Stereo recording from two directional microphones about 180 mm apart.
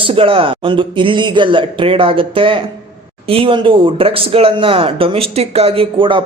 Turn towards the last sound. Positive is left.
turn(degrees=-25)  # may be behind; listen again after turning